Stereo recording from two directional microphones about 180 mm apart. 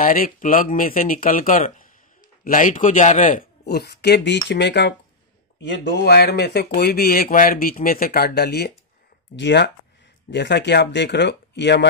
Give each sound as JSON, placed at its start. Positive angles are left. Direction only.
{"t": 0.0, "sound": "speech", "side_deg": 50}
{"t": 3.6, "sound": "speech", "side_deg": 65}